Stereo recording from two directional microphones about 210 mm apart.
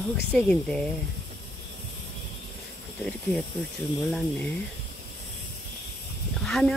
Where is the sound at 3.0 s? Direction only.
Centre (ahead or behind).